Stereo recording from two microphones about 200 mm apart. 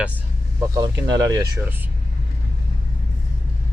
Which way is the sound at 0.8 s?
20° right (ahead or behind).